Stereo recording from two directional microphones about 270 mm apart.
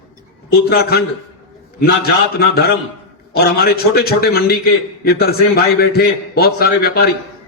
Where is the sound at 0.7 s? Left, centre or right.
Left.